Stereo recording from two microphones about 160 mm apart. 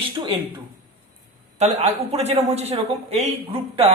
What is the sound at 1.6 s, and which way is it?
A man's voice, 45° right (ahead or behind).